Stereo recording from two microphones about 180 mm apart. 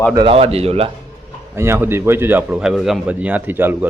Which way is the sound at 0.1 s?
25° right (ahead or behind).